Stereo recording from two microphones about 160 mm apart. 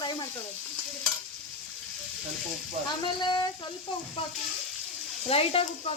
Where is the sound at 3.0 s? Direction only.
30° left (ahead or behind).